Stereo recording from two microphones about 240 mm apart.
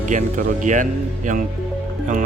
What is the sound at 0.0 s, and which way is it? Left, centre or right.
Speech, right.